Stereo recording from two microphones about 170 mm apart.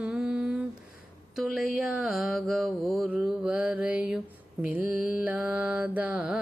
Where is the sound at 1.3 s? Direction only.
Centre (ahead or behind).